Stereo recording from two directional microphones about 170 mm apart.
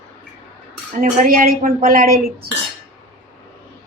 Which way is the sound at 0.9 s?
55° right (ahead or behind).